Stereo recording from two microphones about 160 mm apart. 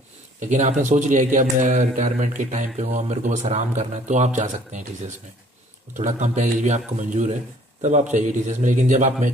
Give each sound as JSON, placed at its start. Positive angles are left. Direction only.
{"t": 0.4, "sound": "a man's voice", "side_deg": -50}